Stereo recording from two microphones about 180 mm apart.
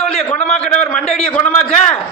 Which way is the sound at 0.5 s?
5° left (ahead or behind).